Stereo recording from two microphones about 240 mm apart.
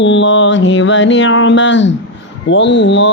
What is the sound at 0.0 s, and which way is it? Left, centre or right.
Mantra, left.